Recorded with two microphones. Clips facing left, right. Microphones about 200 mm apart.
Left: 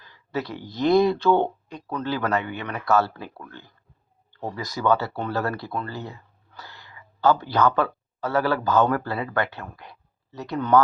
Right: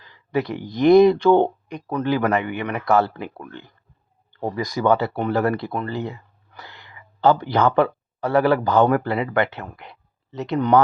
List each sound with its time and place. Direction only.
0.0 s a man's voice: 15° right (ahead or behind)